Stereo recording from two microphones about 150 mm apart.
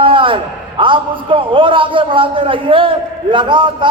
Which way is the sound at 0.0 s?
35° right (ahead or behind).